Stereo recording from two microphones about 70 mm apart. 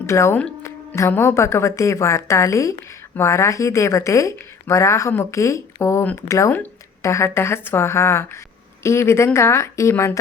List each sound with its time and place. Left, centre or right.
0.0 s a woman's voice: left